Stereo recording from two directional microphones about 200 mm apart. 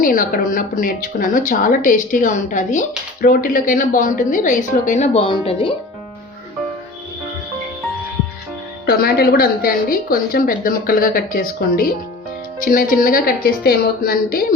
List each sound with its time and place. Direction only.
0.0 s a woman's voice: 45° left (ahead or behind); by 5.7 s 25° left (ahead or behind)
8.9 s a woman's voice: 50° left (ahead or behind)
12.6 s a woman's voice: 45° left (ahead or behind)